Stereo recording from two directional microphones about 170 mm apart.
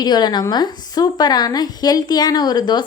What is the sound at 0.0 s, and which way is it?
Speech, 25° left (ahead or behind).